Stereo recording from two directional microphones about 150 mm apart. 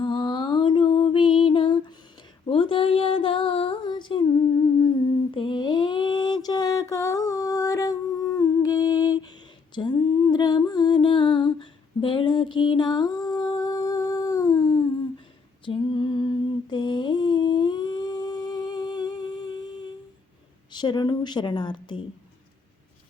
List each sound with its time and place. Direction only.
0.0 s music: 30° left (ahead or behind)
2.5 s a sound: 35° left (ahead or behind)
5.3 s mantra: 35° left (ahead or behind)
9.7 s humming: 30° left (ahead or behind)
15.6 s a sound: 35° left (ahead or behind)
20.7 s a woman's voice: 30° left (ahead or behind)